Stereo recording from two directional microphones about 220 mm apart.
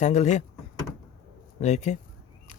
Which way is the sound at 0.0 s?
35° left (ahead or behind).